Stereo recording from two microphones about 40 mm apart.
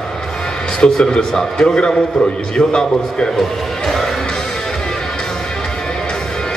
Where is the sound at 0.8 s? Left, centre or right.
Centre.